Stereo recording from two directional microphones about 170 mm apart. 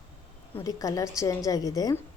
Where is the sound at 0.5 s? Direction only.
20° left (ahead or behind).